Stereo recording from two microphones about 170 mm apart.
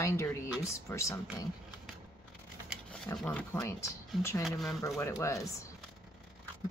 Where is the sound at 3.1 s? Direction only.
5° left (ahead or behind).